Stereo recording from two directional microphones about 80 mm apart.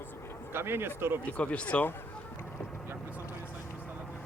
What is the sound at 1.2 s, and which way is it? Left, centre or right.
Speech, centre.